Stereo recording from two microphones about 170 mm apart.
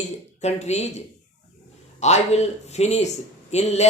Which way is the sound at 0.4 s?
40° left (ahead or behind).